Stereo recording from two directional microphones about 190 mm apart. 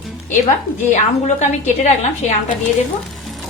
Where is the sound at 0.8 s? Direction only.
40° left (ahead or behind).